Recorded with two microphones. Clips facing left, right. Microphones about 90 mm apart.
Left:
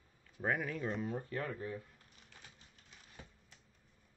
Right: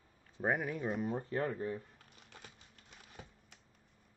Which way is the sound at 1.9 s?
70° right (ahead or behind).